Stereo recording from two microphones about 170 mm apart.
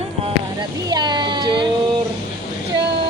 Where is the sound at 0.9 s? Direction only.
25° right (ahead or behind).